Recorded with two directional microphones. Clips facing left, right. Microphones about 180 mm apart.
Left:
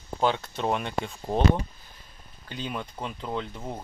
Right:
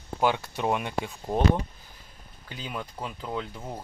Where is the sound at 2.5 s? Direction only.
5° right (ahead or behind).